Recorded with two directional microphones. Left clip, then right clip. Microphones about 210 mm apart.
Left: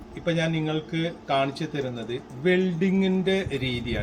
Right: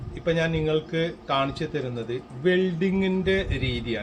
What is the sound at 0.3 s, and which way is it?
A man's voice, 15° right (ahead or behind).